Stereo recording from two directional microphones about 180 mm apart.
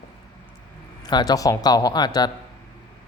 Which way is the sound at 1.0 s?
20° left (ahead or behind).